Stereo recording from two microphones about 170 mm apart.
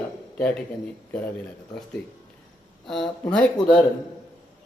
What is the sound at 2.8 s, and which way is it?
Speech, centre (ahead or behind).